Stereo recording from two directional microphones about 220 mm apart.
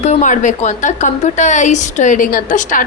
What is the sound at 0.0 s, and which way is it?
A woman's voice, 35° left (ahead or behind).